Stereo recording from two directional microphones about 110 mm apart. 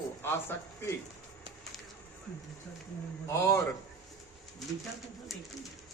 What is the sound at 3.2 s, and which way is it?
Speech, 25° left (ahead or behind).